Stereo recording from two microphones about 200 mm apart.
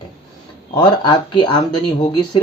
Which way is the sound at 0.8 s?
20° left (ahead or behind).